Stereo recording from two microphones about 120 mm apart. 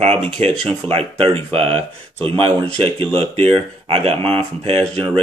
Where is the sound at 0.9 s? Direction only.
55° right (ahead or behind).